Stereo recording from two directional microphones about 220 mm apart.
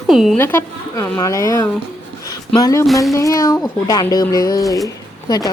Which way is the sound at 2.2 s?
15° left (ahead or behind).